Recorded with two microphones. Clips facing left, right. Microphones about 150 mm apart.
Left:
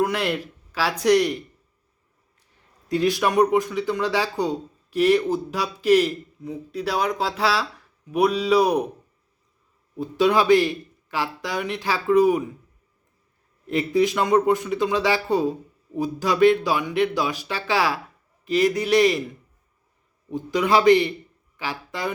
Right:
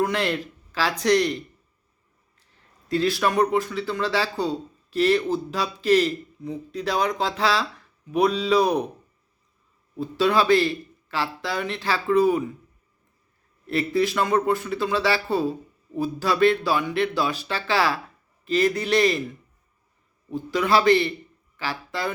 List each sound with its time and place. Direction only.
0.0 s speech: 10° left (ahead or behind)
2.9 s speech: 15° left (ahead or behind)
10.0 s speech: 15° left (ahead or behind)
13.7 s speech: 15° left (ahead or behind)
20.3 s speech: 15° left (ahead or behind)